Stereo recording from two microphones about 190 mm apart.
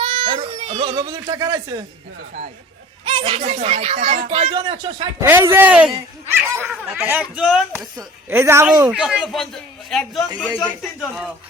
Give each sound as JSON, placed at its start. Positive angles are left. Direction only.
{"t": 0.0, "sound": "speech", "side_deg": -25}
{"t": 3.0, "sound": "speech", "side_deg": -25}
{"t": 5.2, "sound": "speech", "side_deg": -10}
{"t": 8.9, "sound": "speech", "side_deg": -5}